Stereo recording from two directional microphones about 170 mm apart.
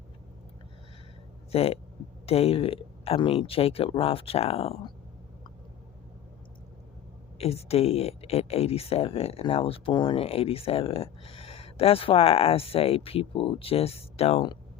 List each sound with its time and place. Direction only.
1.5 s speech: 35° left (ahead or behind)
7.3 s speech: 35° left (ahead or behind)